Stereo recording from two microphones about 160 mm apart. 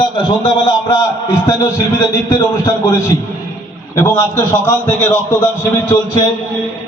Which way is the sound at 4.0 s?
15° left (ahead or behind).